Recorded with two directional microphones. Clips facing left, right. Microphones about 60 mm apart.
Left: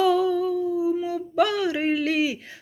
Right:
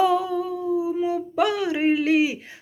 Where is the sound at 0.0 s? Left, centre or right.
Right.